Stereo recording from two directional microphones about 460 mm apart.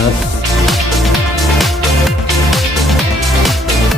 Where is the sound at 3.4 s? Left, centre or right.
Centre.